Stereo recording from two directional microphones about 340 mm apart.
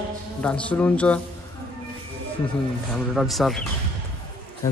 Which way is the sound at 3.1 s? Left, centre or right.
Centre.